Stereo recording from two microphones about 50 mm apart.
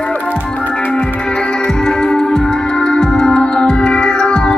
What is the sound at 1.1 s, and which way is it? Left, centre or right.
Music, centre.